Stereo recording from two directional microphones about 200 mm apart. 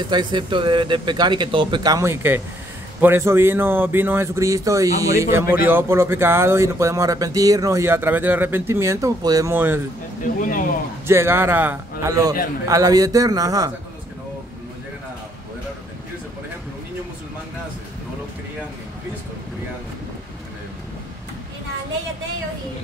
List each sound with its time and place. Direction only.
0.1 s speech: 20° right (ahead or behind)
11.1 s speech: 10° right (ahead or behind)